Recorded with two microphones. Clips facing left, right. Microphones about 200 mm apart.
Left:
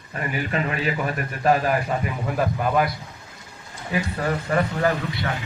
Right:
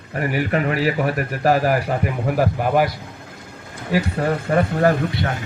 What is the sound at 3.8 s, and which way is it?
A man's voice, 55° right (ahead or behind).